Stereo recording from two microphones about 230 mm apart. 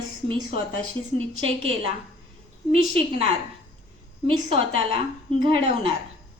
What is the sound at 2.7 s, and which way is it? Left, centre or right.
A woman's voice, right.